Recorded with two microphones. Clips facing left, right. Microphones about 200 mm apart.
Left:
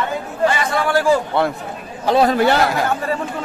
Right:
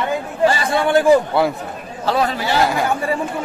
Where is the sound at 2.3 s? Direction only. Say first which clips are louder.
Left 5 dB; 55° left (ahead or behind).